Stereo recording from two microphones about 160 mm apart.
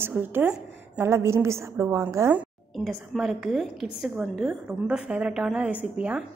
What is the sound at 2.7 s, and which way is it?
A woman's voice, centre (ahead or behind).